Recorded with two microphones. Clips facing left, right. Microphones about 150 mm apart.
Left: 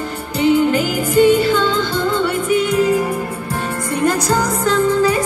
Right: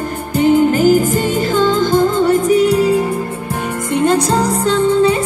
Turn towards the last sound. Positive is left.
turn(degrees=-25)  # may be behind; listen again after turning